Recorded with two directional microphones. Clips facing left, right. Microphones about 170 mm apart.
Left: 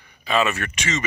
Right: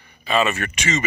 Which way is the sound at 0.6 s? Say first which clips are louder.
Right 3 dB; 5° right (ahead or behind).